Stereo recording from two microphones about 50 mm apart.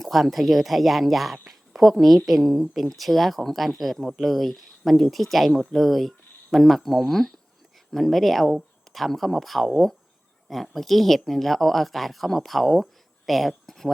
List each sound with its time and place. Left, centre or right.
0.0 s speech: centre